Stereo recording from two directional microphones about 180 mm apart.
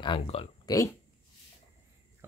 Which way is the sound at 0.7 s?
15° left (ahead or behind).